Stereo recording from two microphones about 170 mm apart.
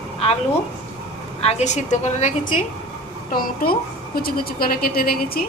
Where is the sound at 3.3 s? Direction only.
60° left (ahead or behind).